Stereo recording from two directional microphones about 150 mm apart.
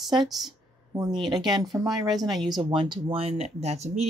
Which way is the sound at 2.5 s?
30° right (ahead or behind).